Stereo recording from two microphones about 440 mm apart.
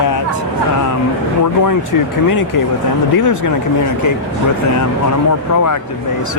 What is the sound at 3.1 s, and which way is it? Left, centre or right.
Speech, left.